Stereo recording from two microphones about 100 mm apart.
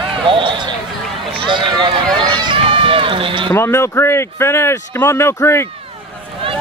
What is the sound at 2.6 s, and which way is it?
Run, 65° right (ahead or behind).